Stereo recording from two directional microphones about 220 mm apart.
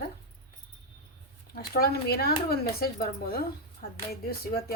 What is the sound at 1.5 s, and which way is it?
Speech, 45° left (ahead or behind).